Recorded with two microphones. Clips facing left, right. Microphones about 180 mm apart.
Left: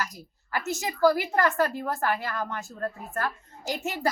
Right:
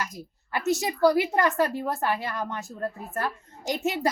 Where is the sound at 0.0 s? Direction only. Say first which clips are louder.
Even; 25° right (ahead or behind).